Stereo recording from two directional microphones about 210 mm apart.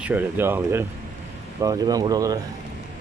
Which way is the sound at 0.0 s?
10° right (ahead or behind).